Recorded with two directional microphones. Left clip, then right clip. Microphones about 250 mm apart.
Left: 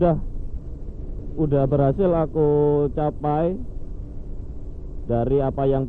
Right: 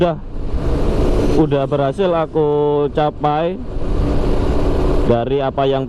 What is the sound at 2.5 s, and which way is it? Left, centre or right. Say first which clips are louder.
Speech: right 3 dB; right.